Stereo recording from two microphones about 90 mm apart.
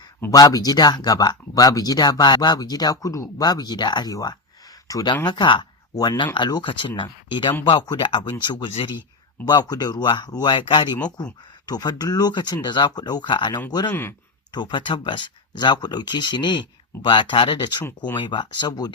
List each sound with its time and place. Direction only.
0.3 s speech: 45° left (ahead or behind)
5.2 s speech: 55° left (ahead or behind)
13.3 s speech: 60° left (ahead or behind)
13.7 s speech: 50° left (ahead or behind)
13.9 s speech: 25° left (ahead or behind)
14.5 s speech: 60° left (ahead or behind)